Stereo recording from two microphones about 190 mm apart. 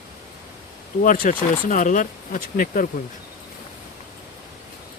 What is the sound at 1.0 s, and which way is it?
Speech, 45° left (ahead or behind).